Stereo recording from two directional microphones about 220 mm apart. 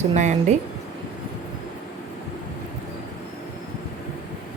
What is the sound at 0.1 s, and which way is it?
Speech, 30° right (ahead or behind).